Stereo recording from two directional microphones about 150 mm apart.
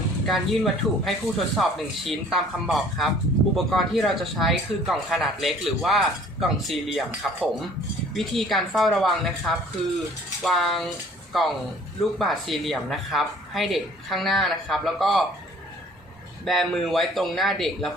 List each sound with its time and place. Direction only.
0.3 s speech: centre (ahead or behind)
16.5 s speech: centre (ahead or behind)